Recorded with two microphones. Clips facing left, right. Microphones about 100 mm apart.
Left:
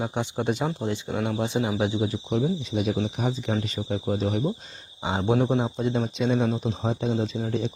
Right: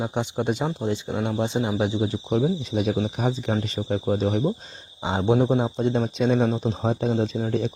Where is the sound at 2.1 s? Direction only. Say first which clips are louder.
Right 3 dB; 50° right (ahead or behind).